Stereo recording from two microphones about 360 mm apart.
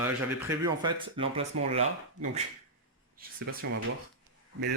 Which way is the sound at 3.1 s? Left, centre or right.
Right.